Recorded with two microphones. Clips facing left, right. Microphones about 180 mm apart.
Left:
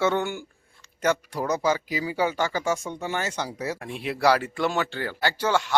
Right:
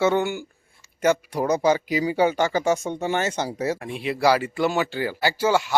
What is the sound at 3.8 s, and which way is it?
Speech, centre (ahead or behind).